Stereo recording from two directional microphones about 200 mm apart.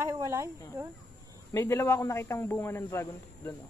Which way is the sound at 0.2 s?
15° right (ahead or behind).